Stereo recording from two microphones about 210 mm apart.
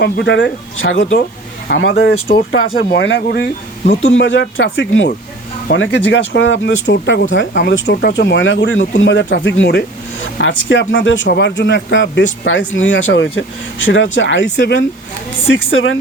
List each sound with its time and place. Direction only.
0.0 s speech: 55° left (ahead or behind)
1.7 s speech: 55° left (ahead or behind)
15.4 s speech: 70° left (ahead or behind)